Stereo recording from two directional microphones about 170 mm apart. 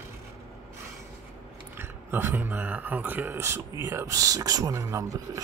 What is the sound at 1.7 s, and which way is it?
Speech, 15° right (ahead or behind).